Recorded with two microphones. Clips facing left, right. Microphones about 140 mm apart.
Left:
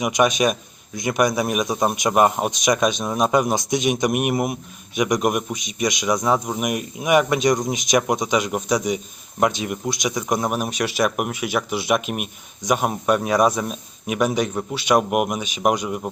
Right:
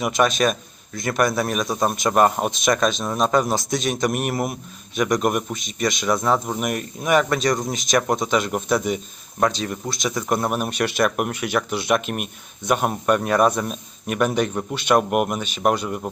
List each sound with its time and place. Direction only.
0.2 s speech: 15° left (ahead or behind)
5.2 s a man's voice: 5° left (ahead or behind)
5.8 s speech: 15° left (ahead or behind)
6.4 s speech: 5° left (ahead or behind)